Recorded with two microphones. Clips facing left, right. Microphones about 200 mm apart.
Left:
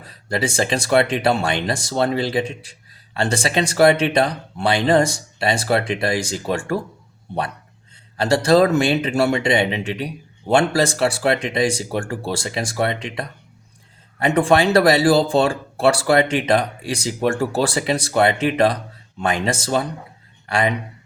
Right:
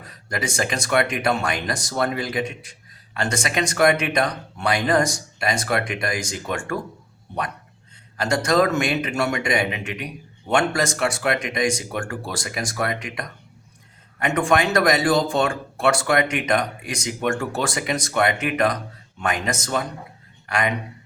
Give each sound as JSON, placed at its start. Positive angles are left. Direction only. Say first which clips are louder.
{"t": 0.0, "sound": "a man's voice", "louder": "left 5 dB", "side_deg": 30}
{"t": 8.2, "sound": "a man's voice", "louder": "left 5 dB", "side_deg": 30}